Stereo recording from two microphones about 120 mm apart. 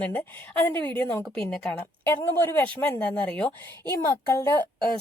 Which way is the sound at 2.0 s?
20° left (ahead or behind).